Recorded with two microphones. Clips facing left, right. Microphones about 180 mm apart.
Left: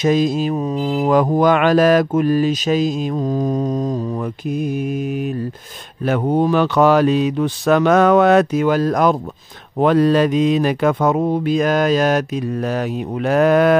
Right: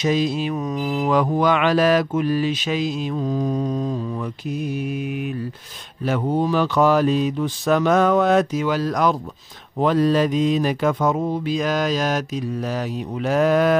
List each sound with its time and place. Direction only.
0.0 s mantra: 45° left (ahead or behind)
0.6 s mantra: 30° left (ahead or behind)
1.1 s mantra: 45° left (ahead or behind)
6.0 s speech: 60° left (ahead or behind)
9.8 s mantra: 65° left (ahead or behind)